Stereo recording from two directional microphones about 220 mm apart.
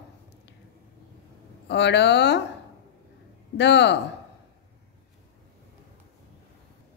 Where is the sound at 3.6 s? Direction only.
50° left (ahead or behind).